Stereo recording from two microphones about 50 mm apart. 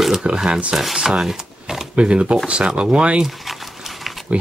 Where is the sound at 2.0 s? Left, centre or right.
Right.